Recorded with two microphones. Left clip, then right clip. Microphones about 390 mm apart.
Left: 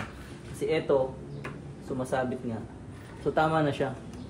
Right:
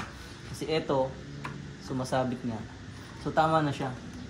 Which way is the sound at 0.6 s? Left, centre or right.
Centre.